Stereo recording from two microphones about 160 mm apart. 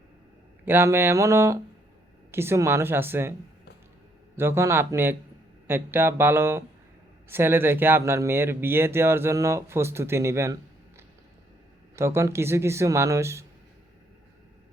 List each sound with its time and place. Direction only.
0.6 s speech: 15° right (ahead or behind)
4.4 s speech: 15° right (ahead or behind)